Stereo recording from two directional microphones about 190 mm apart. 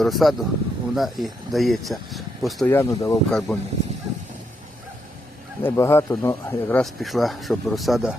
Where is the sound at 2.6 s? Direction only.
15° left (ahead or behind).